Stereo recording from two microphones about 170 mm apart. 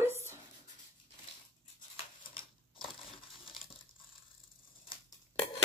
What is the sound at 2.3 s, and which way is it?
Crushing, 30° left (ahead or behind).